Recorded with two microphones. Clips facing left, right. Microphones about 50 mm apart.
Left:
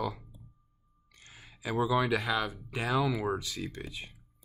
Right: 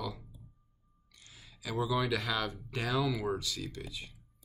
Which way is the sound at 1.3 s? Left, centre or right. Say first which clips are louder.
Left 5 dB; left.